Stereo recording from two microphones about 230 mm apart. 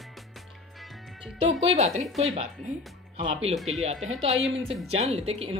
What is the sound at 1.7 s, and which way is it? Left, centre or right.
Speech, right.